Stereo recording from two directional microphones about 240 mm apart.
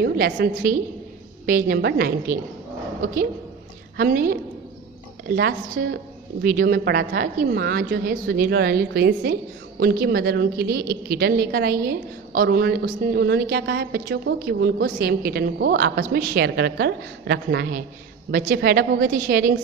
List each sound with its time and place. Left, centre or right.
0.0 s a woman's voice: right
3.9 s a woman's voice: right